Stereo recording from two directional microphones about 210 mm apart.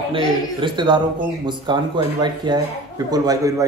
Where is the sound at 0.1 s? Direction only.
25° right (ahead or behind).